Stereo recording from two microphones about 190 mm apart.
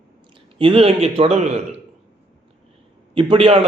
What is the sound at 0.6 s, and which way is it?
A man's voice, 30° right (ahead or behind).